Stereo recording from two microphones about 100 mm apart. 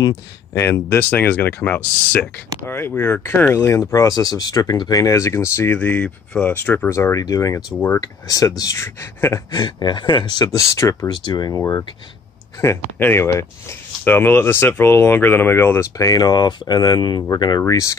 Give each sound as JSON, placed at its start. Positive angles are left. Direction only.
{"t": 0.0, "sound": "speech", "side_deg": 40}
{"t": 0.6, "sound": "speech", "side_deg": 25}
{"t": 9.5, "sound": "speech", "side_deg": 45}
{"t": 11.1, "sound": "speech", "side_deg": 45}
{"t": 11.5, "sound": "speech", "side_deg": 30}
{"t": 13.0, "sound": "speech", "side_deg": 25}